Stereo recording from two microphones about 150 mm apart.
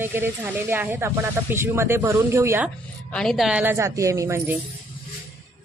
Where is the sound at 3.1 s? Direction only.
5° left (ahead or behind); by 4.5 s 20° right (ahead or behind).